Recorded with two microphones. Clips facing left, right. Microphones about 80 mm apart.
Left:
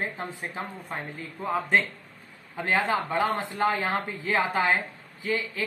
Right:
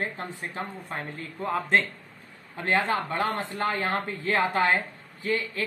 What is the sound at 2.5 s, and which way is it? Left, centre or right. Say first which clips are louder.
Speech: even; centre.